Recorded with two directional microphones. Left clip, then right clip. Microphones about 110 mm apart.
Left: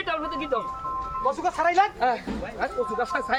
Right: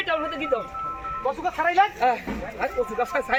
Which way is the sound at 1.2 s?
30° right (ahead or behind).